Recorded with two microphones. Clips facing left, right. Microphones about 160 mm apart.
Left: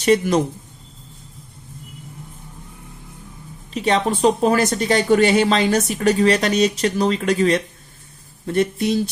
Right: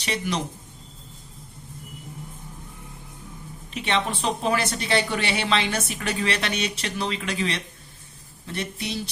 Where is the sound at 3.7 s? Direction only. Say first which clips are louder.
Left 7 dB; 40° left (ahead or behind).